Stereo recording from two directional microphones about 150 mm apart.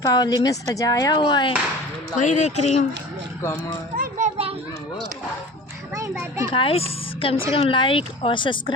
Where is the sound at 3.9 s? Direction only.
70° right (ahead or behind).